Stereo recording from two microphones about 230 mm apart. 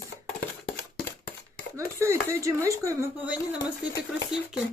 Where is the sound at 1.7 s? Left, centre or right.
Centre.